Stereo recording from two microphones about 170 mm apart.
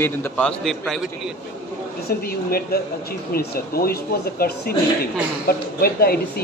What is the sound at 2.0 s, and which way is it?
A man's voice, 65° left (ahead or behind).